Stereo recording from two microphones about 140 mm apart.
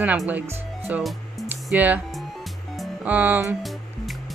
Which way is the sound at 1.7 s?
10° right (ahead or behind).